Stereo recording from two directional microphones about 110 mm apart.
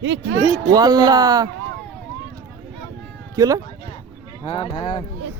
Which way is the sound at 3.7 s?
45° left (ahead or behind).